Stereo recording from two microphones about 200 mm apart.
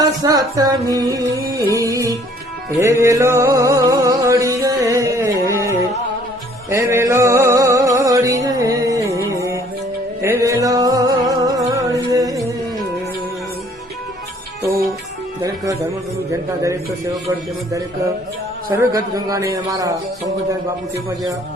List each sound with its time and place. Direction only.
0.2 s music: 20° right (ahead or behind)
15.4 s music: 15° right (ahead or behind)
18.7 s speech: 15° right (ahead or behind)